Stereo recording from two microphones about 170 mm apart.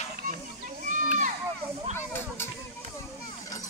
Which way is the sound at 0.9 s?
50° right (ahead or behind).